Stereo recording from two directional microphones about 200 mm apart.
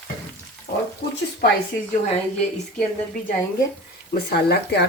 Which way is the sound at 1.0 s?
50° left (ahead or behind).